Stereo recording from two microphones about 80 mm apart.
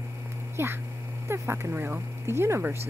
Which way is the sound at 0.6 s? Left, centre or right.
Right.